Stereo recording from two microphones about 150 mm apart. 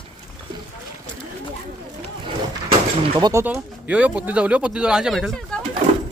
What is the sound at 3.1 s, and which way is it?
Speech, 25° right (ahead or behind).